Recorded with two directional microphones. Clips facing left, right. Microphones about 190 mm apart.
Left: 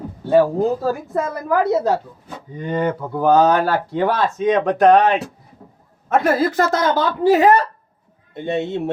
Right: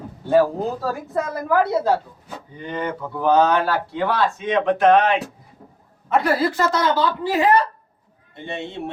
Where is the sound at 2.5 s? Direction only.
40° left (ahead or behind).